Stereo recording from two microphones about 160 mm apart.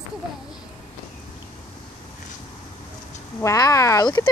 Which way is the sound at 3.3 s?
20° left (ahead or behind).